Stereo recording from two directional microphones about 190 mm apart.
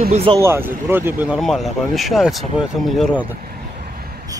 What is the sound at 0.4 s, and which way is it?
Speech, 10° right (ahead or behind).